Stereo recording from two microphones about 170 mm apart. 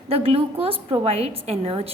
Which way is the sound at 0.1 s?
35° right (ahead or behind).